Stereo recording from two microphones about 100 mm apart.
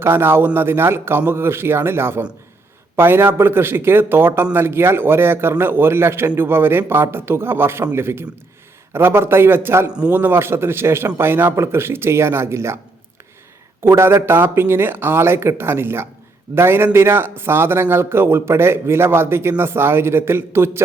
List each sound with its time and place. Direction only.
0.0 s a man's voice: 25° right (ahead or behind)
9.9 s a man's voice: 10° right (ahead or behind)
10.2 s a man's voice: 20° right (ahead or behind)
13.8 s a man's voice: 25° right (ahead or behind)